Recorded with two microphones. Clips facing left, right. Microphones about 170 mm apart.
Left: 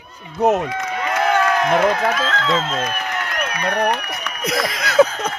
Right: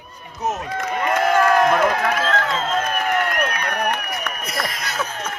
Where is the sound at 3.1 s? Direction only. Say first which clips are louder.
Right 4 dB; 50° right (ahead or behind).